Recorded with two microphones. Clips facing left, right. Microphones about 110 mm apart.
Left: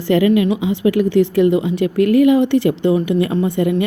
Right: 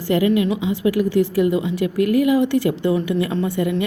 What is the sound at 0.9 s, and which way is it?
Speech, 90° left.